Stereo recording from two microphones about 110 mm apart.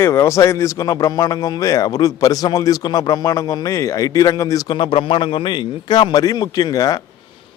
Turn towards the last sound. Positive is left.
turn(degrees=35)  # may be behind; listen again after turning